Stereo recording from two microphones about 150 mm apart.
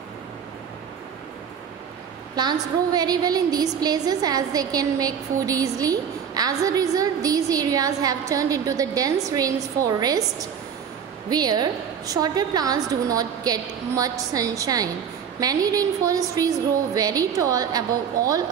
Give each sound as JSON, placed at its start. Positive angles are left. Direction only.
{"t": 2.3, "sound": "a woman's voice", "side_deg": -25}
{"t": 11.2, "sound": "a woman's voice", "side_deg": -25}